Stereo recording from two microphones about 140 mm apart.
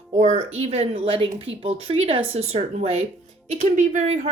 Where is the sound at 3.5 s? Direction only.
55° right (ahead or behind).